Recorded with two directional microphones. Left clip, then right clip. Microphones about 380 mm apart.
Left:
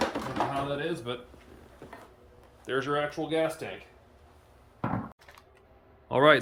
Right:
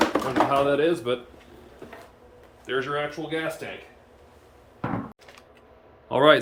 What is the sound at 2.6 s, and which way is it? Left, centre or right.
Speech, left.